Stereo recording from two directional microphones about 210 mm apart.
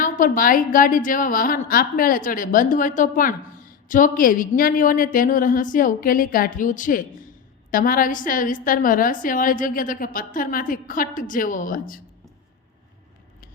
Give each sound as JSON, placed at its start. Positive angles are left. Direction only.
{"t": 0.0, "sound": "a woman's voice", "side_deg": 40}